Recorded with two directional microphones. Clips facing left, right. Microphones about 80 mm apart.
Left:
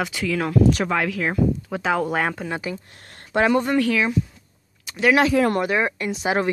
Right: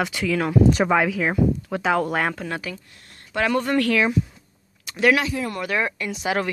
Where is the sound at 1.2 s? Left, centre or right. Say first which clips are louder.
Right 1 dB; centre.